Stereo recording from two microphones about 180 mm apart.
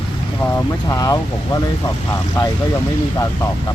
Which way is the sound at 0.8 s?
20° left (ahead or behind).